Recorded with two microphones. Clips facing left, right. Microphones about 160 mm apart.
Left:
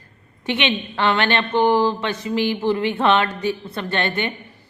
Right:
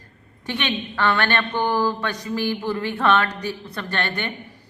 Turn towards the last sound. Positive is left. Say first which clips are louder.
# left 4 dB
turn(degrees=15)  # may be behind; listen again after turning